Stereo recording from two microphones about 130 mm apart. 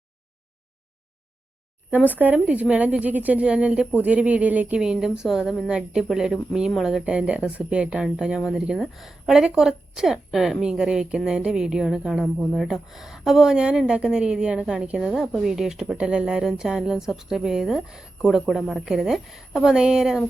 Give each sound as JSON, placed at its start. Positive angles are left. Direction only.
{"t": 2.0, "sound": "a woman's voice", "side_deg": -15}